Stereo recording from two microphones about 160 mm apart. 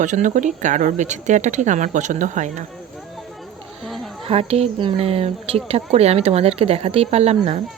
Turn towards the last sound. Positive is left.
turn(degrees=-40)  # may be behind; listen again after turning